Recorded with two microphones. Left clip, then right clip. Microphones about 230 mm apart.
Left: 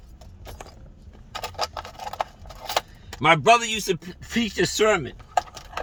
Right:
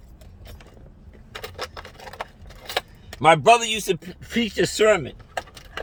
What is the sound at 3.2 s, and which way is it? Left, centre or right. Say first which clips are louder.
Speech: right 2 dB; centre.